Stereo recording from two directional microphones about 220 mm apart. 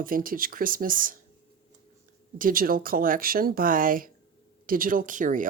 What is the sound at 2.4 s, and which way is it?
A woman's voice, 40° right (ahead or behind).